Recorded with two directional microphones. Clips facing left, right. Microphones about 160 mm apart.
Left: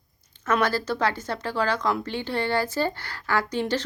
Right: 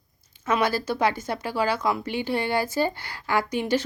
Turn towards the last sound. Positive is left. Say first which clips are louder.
# right 1 dB
turn(degrees=-10)  # may be behind; listen again after turning